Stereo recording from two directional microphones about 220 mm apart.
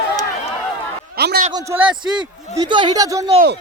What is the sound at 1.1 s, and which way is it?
Speech, 45° right (ahead or behind).